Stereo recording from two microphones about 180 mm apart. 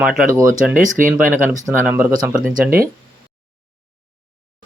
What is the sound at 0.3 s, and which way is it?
Speech, 15° right (ahead or behind).